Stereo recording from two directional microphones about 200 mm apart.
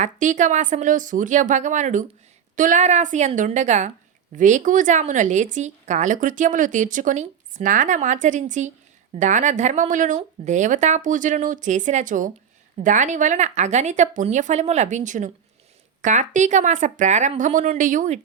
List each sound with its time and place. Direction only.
0.0 s a woman's voice: 40° right (ahead or behind)